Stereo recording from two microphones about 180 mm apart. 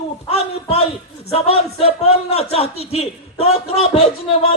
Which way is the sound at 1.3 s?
35° left (ahead or behind).